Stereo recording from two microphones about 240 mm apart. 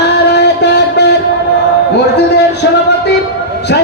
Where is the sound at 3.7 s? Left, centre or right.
Left.